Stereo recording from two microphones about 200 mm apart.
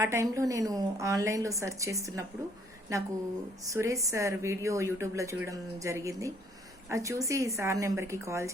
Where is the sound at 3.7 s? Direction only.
15° right (ahead or behind).